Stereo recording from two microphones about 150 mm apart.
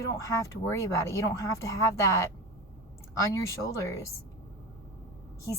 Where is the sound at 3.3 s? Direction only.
20° left (ahead or behind).